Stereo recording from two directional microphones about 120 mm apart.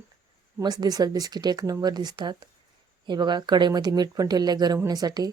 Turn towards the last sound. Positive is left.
turn(degrees=-35)  # may be behind; listen again after turning